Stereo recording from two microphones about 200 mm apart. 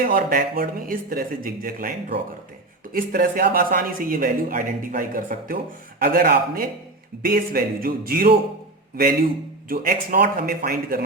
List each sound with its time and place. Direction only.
0.1 s speech: 45° right (ahead or behind)